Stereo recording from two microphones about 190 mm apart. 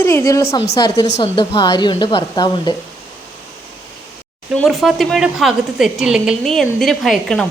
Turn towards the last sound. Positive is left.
turn(degrees=0)  # may be behind; listen again after turning